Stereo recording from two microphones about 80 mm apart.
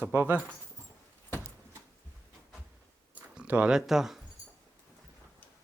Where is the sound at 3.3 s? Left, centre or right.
Centre.